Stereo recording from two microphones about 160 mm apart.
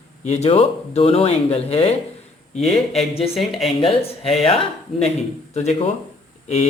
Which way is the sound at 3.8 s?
40° left (ahead or behind).